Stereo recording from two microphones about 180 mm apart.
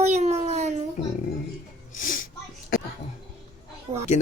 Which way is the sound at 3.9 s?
20° right (ahead or behind).